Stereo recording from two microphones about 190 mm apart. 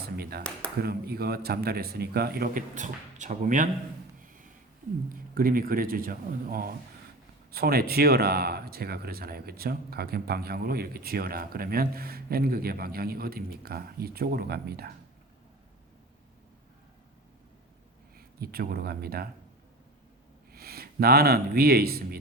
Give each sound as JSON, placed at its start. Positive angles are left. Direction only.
{"t": 0.0, "sound": "a sound", "side_deg": -55}
{"t": 0.8, "sound": "a man's voice", "side_deg": -55}
{"t": 4.2, "sound": "a sound", "side_deg": -45}
{"t": 5.0, "sound": "speech", "side_deg": -50}
{"t": 18.2, "sound": "speech", "side_deg": -55}
{"t": 20.5, "sound": "speech", "side_deg": -55}